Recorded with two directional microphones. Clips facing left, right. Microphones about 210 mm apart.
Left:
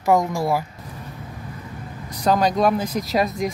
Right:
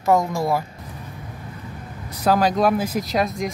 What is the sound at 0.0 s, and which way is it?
Speech, 15° left (ahead or behind).